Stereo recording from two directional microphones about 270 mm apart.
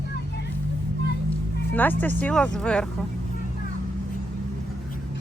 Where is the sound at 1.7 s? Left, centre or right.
Centre.